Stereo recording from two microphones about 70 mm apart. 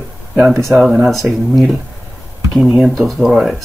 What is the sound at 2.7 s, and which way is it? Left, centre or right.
Speech, centre.